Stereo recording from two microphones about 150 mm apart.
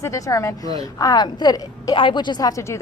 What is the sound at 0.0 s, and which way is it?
A woman's voice, 20° left (ahead or behind).